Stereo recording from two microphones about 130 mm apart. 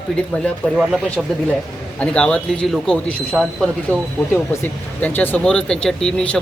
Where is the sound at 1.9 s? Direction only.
10° left (ahead or behind).